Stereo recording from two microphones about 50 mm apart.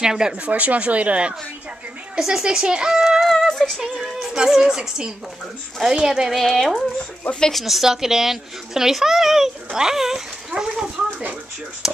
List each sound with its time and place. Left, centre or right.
0.0 s a child's voice: centre
0.5 s speech: right
2.1 s a child's voice: centre
3.3 s music: centre
3.8 s a child's voice: centre
6.3 s a child's voice: centre